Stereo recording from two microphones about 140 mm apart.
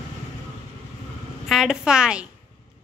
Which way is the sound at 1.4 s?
5° right (ahead or behind).